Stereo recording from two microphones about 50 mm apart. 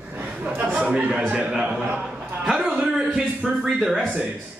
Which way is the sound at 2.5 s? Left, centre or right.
Centre.